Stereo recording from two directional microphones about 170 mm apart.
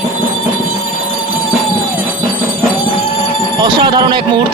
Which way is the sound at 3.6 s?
25° right (ahead or behind).